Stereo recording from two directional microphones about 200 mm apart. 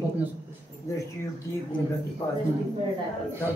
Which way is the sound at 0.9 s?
15° left (ahead or behind).